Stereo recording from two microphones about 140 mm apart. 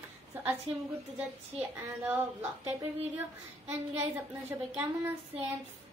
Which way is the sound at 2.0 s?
15° right (ahead or behind).